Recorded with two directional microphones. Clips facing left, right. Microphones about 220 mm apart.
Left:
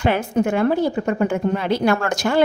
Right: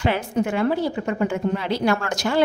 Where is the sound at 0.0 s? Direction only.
50° left (ahead or behind).